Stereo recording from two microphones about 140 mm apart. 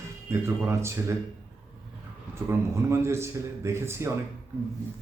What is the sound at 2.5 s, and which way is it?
A man's voice, 20° right (ahead or behind).